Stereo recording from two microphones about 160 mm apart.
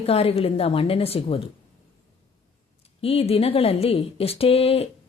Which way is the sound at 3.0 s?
35° left (ahead or behind).